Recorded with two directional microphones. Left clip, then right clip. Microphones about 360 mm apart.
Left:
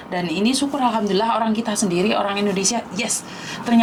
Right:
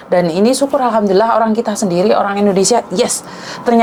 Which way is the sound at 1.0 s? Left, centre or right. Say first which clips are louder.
Right 8 dB; right.